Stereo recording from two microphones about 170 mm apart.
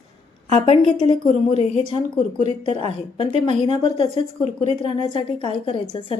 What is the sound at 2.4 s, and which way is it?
Speech, 30° left (ahead or behind).